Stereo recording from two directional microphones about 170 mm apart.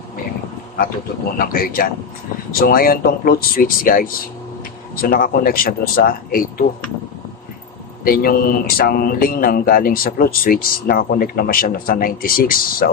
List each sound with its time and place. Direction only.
1.4 s a man's voice: 60° left (ahead or behind)
8.0 s a man's voice: 60° left (ahead or behind)